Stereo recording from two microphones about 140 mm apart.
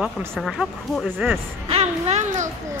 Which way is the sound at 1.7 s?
50° right (ahead or behind).